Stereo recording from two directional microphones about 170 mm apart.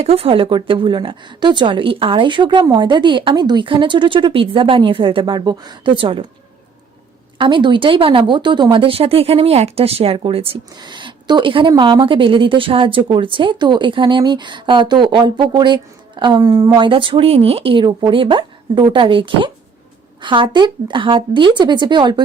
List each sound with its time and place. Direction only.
0.0 s speech: 35° right (ahead or behind)
7.3 s speech: 30° right (ahead or behind)